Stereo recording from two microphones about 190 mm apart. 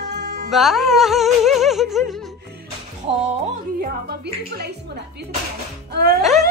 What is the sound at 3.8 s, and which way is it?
Music, 55° right (ahead or behind).